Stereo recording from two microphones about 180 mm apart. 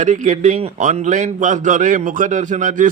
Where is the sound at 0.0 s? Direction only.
45° right (ahead or behind).